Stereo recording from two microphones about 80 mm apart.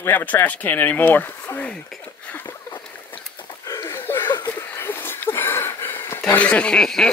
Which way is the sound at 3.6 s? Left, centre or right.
Left.